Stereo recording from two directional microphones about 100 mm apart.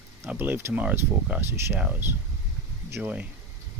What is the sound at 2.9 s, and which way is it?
Speech, 15° right (ahead or behind).